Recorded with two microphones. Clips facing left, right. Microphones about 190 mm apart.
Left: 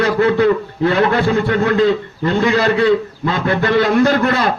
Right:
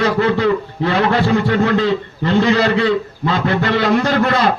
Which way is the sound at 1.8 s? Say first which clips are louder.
Left 3 dB; 50° left (ahead or behind).